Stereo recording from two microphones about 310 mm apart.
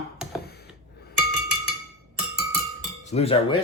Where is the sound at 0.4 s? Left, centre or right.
Left.